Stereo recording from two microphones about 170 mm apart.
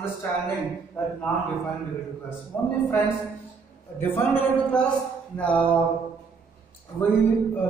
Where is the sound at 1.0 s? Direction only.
5° left (ahead or behind).